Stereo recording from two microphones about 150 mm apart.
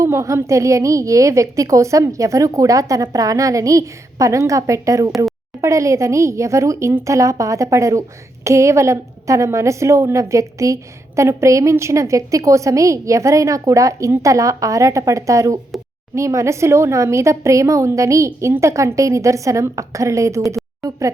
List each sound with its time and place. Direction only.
0.0 s a woman's voice: 20° right (ahead or behind)